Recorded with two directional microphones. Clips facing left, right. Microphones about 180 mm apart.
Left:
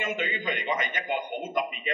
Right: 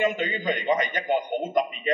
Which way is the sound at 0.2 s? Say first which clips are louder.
Right 4 dB; 40° right (ahead or behind).